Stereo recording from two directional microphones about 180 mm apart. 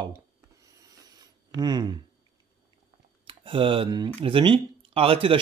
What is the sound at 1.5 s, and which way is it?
Speech, 20° right (ahead or behind).